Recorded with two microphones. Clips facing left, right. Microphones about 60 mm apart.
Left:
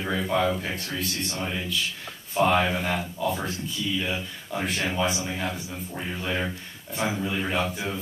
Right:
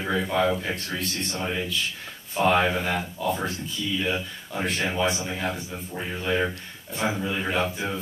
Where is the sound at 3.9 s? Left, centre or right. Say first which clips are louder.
Right 4 dB; centre.